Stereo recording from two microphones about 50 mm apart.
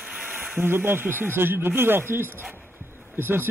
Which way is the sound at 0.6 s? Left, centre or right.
Right.